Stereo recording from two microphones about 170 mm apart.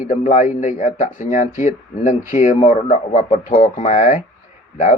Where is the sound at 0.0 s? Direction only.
50° left (ahead or behind).